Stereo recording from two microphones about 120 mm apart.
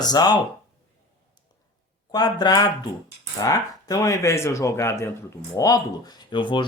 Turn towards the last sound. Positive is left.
turn(degrees=40)  # may be behind; listen again after turning